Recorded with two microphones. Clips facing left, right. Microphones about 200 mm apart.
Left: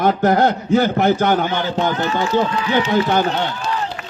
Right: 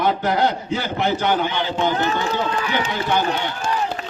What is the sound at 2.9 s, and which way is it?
Speech, 50° left (ahead or behind).